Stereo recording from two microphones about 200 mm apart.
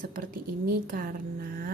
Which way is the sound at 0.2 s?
45° right (ahead or behind).